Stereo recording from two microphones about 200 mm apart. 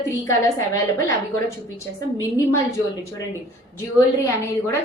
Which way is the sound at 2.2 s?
15° left (ahead or behind).